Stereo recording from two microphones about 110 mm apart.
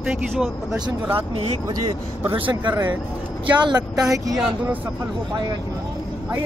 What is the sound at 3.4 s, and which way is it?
Speech, 40° right (ahead or behind).